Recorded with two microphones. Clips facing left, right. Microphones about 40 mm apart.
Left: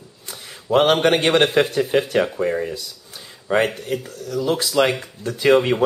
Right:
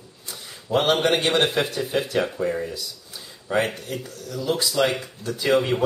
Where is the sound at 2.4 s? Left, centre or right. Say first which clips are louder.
Left 3 dB; left.